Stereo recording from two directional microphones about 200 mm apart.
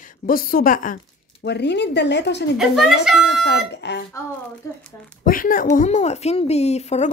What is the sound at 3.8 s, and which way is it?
Speech, 60° left (ahead or behind).